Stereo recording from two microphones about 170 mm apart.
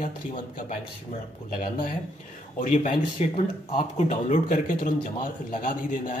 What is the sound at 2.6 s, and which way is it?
A man's voice, 45° left (ahead or behind).